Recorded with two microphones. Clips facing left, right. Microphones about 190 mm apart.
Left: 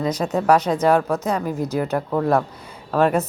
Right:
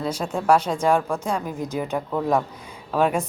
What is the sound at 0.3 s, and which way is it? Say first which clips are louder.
A woman's voice: left 2 dB; 5° left (ahead or behind).